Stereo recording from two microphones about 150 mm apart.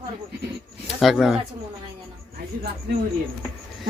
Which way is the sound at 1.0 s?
Centre (ahead or behind).